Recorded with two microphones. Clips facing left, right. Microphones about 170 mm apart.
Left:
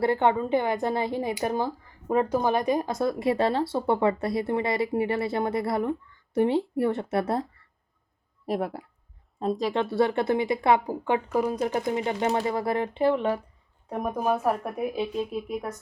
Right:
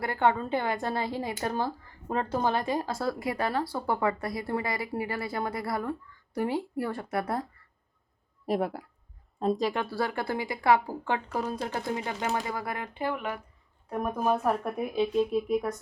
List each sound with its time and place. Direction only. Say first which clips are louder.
0.0 s speech: left 4 dB; 20° left (ahead or behind)
8.4 s a woman's voice: even; centre (ahead or behind)
9.9 s speech: left 7 dB; 25° left (ahead or behind)
14.3 s a woman's voice: left 1 dB; 5° left (ahead or behind)